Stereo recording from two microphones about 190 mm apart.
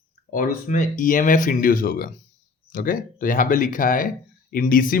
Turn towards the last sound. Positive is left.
turn(degrees=45)  # may be behind; listen again after turning